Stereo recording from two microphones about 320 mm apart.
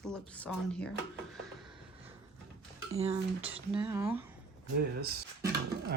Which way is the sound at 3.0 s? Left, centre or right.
Centre.